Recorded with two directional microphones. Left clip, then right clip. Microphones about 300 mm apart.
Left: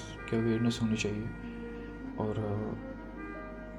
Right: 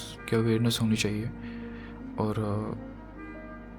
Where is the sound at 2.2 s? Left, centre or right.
Right.